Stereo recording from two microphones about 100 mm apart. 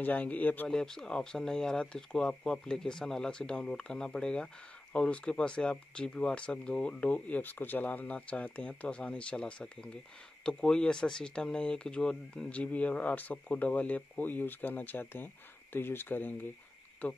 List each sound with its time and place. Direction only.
0.0 s speech: 15° left (ahead or behind)
0.7 s speech: 5° left (ahead or behind)